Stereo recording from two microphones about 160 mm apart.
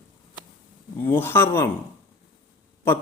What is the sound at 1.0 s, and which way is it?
Speech, 15° left (ahead or behind).